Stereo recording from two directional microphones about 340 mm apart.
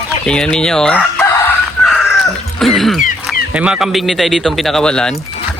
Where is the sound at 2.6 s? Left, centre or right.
Centre.